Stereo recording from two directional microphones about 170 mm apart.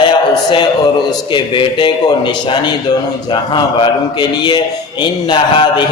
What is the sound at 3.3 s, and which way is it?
A man's voice, 25° left (ahead or behind).